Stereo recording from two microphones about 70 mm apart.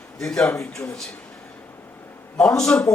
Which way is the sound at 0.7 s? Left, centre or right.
Centre.